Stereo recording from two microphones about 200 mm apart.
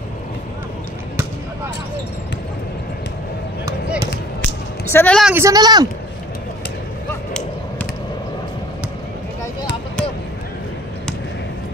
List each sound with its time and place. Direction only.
3.6 s basketball bounce: 15° right (ahead or behind)
4.8 s speech: 10° left (ahead or behind)
5.2 s speech: 10° right (ahead or behind)